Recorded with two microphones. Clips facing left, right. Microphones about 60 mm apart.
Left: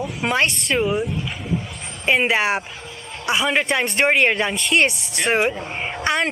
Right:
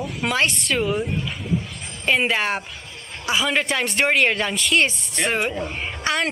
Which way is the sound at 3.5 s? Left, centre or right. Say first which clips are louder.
Left 2 dB; centre.